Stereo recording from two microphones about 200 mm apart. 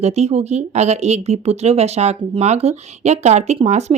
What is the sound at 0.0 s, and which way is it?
Speech, 35° right (ahead or behind).